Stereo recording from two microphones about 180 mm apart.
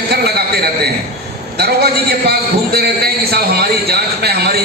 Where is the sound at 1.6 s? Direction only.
65° right (ahead or behind).